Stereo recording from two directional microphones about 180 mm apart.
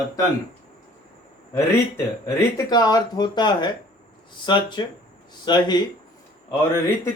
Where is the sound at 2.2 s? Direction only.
20° left (ahead or behind).